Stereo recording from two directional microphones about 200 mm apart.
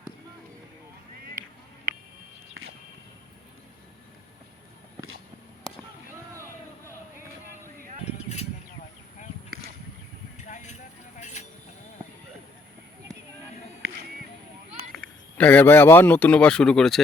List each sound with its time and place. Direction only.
10.3 s vehicle: 35° left (ahead or behind)
14.9 s speech: 5° left (ahead or behind)